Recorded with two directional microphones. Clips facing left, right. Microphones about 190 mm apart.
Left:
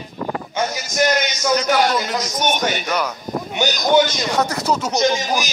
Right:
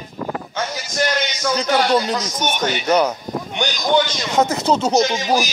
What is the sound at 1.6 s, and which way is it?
Speech, 35° right (ahead or behind).